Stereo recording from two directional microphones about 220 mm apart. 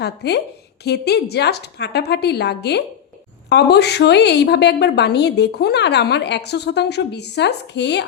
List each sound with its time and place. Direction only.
0.0 s a woman's voice: 50° left (ahead or behind)